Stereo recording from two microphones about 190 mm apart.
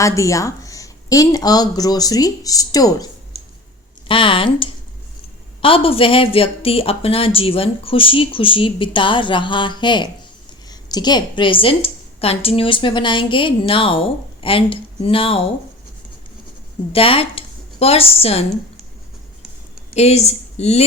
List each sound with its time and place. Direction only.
0.0 s a woman's voice: 15° left (ahead or behind)
16.9 s a woman's voice: 30° left (ahead or behind)
19.9 s a woman's voice: 35° left (ahead or behind)